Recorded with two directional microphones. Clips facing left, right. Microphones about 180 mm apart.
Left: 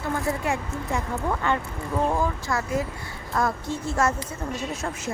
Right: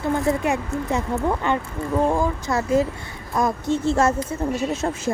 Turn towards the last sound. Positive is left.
turn(degrees=-30)  # may be behind; listen again after turning